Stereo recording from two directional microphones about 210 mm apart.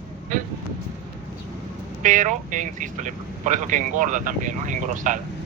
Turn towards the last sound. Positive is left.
turn(degrees=-35)  # may be behind; listen again after turning